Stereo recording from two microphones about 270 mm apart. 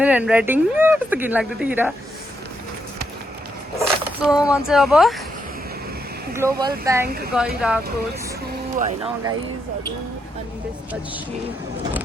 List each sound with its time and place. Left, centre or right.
0.0 s speech: centre
3.8 s a sound: centre
4.4 s speech: centre
6.3 s speech: centre
8.8 s speech: centre